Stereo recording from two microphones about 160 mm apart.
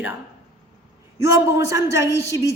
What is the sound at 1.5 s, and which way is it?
Speech, 20° right (ahead or behind).